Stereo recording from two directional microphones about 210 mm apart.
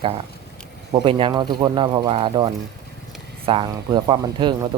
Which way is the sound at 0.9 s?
20° right (ahead or behind).